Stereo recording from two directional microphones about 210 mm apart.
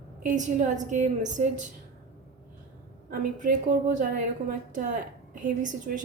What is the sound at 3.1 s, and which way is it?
A woman's voice, 40° right (ahead or behind).